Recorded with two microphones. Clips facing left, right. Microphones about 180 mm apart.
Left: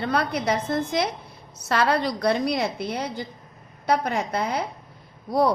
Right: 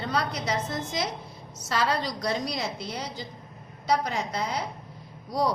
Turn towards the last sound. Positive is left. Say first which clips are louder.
# left 6 dB
turn(degrees=55)  # may be behind; listen again after turning